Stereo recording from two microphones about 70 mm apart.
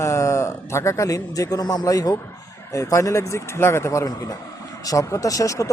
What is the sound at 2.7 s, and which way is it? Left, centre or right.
Speech, left.